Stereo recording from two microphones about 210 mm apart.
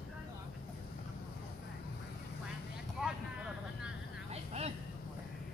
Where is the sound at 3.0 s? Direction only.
5° right (ahead or behind).